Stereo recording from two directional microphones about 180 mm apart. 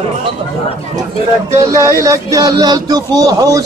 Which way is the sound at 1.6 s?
15° right (ahead or behind).